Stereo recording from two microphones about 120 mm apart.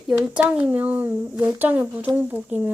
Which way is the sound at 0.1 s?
10° right (ahead or behind).